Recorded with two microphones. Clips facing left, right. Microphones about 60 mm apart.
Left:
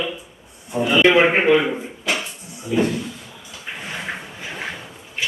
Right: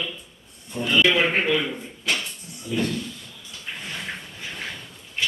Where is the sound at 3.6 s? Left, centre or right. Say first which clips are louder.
Left 4 dB; centre.